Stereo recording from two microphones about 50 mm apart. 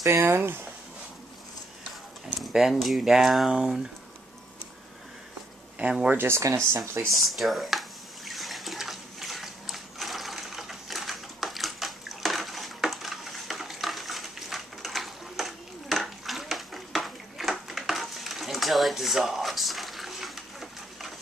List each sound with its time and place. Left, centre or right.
0.0 s speech: right
2.8 s speech: centre
5.8 s speech: right
6.1 s speech: right
6.4 s speech: right
7.2 s speech: centre
8.3 s a sound: centre